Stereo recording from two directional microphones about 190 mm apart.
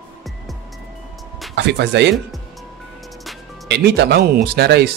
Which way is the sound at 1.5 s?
65° right (ahead or behind).